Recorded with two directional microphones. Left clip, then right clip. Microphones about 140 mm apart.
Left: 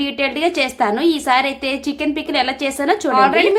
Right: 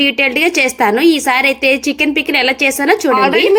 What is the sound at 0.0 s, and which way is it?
A woman's voice, 15° right (ahead or behind).